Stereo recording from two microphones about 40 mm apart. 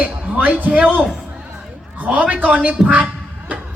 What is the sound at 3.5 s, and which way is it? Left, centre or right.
Music, right.